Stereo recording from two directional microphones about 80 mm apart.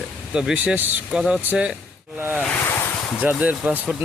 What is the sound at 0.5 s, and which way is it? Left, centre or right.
Speech, right.